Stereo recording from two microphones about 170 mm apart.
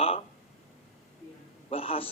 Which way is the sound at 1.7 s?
35° left (ahead or behind).